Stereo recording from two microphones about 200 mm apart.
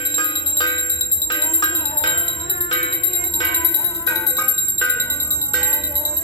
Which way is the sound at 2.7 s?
30° left (ahead or behind).